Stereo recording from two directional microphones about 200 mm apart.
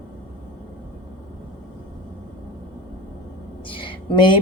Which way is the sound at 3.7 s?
25° left (ahead or behind).